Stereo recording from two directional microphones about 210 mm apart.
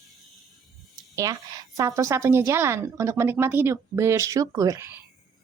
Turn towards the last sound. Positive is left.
turn(degrees=-15)  # may be behind; listen again after turning